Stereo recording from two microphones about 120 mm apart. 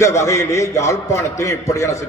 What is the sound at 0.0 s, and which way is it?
A man's voice, 25° left (ahead or behind).